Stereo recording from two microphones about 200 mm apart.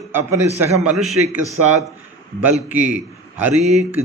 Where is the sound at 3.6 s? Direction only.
35° right (ahead or behind).